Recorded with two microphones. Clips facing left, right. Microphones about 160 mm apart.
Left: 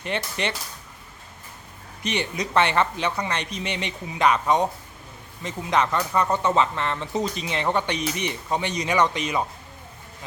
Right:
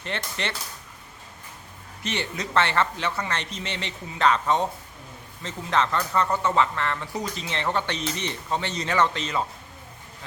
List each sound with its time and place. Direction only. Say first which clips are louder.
0.0 s speech: left 4 dB; 15° left (ahead or behind)
2.0 s speech: left 3 dB; 15° left (ahead or behind)